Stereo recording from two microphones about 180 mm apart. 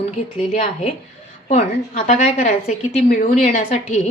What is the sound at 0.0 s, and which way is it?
Speech, 35° left (ahead or behind).